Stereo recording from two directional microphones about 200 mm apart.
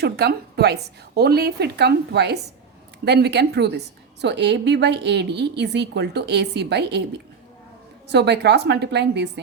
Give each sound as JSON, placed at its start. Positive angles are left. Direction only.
{"t": 0.0, "sound": "a woman's voice", "side_deg": -55}
{"t": 8.1, "sound": "a woman's voice", "side_deg": -60}